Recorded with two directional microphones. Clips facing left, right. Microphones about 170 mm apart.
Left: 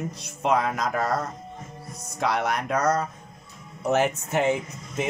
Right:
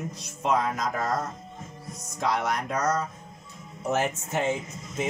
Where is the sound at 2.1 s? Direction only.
65° left (ahead or behind).